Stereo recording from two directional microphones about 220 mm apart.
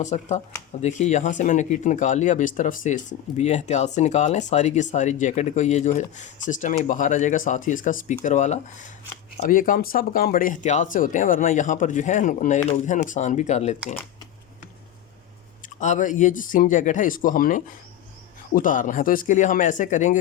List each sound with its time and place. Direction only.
0.0 s speech: 30° left (ahead or behind)
15.8 s speech: 35° left (ahead or behind)